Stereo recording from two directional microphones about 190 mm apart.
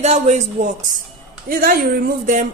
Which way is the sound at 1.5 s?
50° right (ahead or behind).